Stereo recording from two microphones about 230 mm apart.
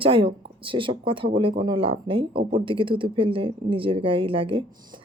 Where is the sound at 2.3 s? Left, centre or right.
Right.